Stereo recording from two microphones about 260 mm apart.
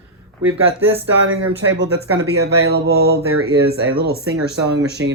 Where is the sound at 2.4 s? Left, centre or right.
Right.